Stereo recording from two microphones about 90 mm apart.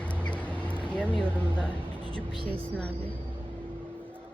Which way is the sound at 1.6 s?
15° left (ahead or behind).